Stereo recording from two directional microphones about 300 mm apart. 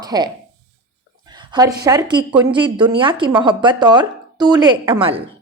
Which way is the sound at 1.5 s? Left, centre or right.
Centre.